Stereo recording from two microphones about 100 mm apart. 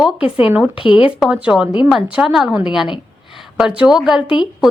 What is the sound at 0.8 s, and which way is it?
Speech, 60° left (ahead or behind).